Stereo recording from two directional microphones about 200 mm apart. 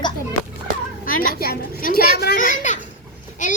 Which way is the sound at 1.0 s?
45° left (ahead or behind).